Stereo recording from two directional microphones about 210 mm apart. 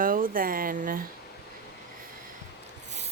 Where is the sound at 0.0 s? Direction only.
40° right (ahead or behind).